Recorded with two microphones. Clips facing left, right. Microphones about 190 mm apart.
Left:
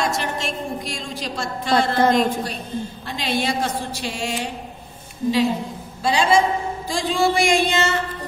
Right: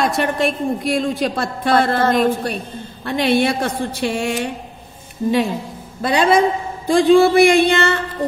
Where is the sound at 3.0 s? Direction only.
60° right (ahead or behind).